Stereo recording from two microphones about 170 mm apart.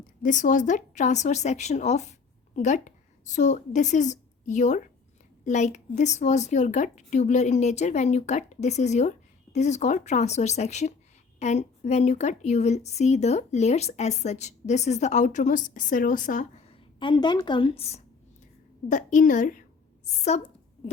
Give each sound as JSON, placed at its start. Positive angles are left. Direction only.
{"t": 0.2, "sound": "a woman's voice", "side_deg": 50}
{"t": 18.9, "sound": "a woman's voice", "side_deg": 50}